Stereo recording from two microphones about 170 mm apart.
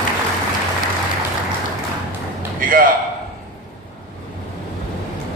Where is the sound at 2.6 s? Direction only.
55° right (ahead or behind).